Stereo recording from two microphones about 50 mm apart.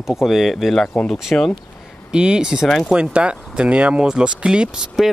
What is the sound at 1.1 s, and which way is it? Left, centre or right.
Speech, centre.